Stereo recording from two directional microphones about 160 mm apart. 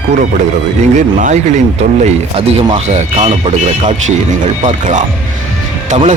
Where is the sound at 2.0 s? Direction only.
40° right (ahead or behind).